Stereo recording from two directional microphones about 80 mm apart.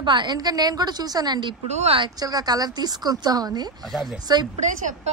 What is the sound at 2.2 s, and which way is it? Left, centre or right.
A woman's voice, right.